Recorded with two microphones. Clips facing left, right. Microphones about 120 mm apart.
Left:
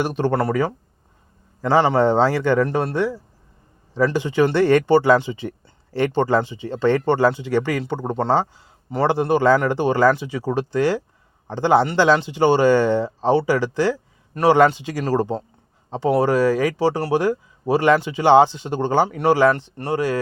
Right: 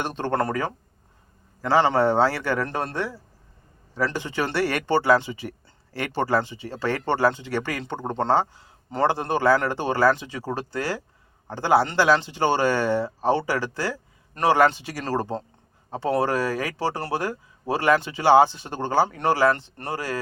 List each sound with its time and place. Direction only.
0.0 s a man's voice: 10° left (ahead or behind)